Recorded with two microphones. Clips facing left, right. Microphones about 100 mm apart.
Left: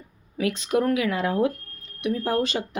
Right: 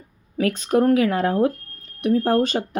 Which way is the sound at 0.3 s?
45° right (ahead or behind).